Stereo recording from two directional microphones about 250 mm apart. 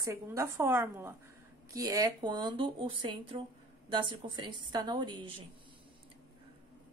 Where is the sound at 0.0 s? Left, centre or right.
Centre.